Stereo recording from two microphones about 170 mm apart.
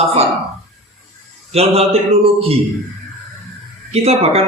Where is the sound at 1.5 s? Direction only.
35° right (ahead or behind).